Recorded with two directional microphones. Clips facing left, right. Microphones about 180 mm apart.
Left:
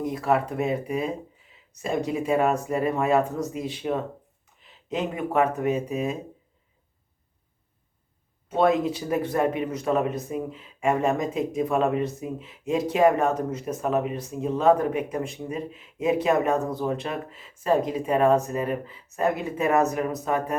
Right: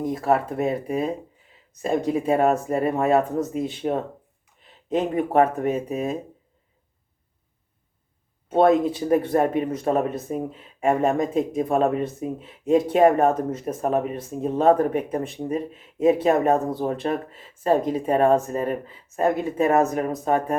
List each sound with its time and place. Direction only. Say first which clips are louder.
0.1 s speech: right 2 dB; 40° right (ahead or behind)
4.9 s speech: right 4 dB; 40° right (ahead or behind)
8.4 s speech: right 4 dB; 45° right (ahead or behind)
11.5 s speech: even; 35° right (ahead or behind)
12.6 s speech: right 5 dB; 55° right (ahead or behind)
13.2 s speech: right 4 dB; 35° right (ahead or behind)